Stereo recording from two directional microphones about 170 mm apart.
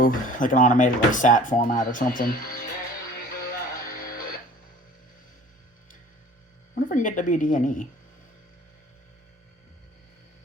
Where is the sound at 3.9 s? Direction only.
60° left (ahead or behind).